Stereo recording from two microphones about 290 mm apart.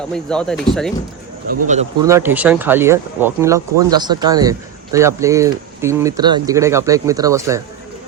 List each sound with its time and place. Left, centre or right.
0.1 s speech: centre
1.6 s speech: right
2.0 s speech: centre